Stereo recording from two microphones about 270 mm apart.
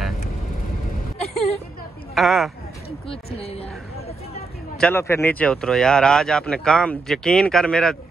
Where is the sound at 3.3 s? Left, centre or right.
Left.